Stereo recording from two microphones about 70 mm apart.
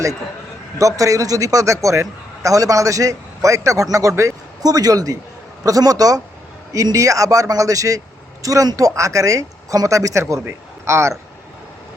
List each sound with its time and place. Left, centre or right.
0.8 s a man's voice: right
4.6 s a man's voice: right